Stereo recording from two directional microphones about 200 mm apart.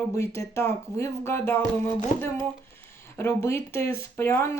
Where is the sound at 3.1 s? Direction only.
15° left (ahead or behind).